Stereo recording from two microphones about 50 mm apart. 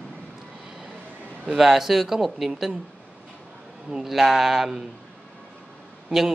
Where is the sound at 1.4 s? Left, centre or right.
Centre.